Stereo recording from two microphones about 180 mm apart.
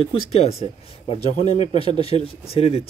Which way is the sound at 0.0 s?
35° left (ahead or behind).